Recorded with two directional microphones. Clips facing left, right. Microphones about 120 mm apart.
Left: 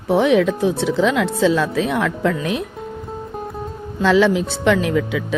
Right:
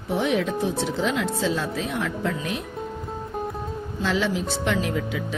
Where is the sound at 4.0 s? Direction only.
90° left.